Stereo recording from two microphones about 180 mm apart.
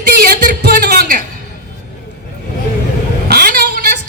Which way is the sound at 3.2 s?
55° right (ahead or behind).